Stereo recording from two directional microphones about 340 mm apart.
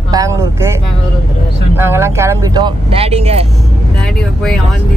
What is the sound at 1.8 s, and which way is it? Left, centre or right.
Speech, centre.